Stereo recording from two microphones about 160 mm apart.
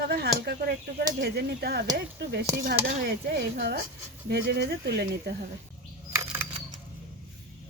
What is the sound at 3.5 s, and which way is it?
Speech, 90° right.